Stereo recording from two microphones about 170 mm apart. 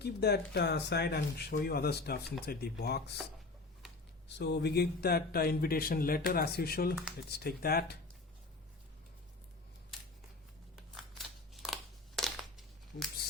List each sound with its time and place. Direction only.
0.0 s speech: 75° left (ahead or behind)
4.3 s speech: 85° left; by 7.9 s 65° left (ahead or behind)
11.1 s a sound: centre (ahead or behind)